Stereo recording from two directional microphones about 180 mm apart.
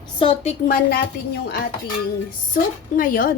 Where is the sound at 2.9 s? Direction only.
50° left (ahead or behind).